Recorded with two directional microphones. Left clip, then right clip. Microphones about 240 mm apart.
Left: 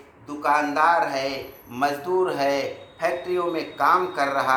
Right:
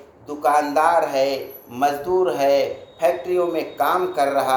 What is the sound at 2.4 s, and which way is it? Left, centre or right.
Speech, left.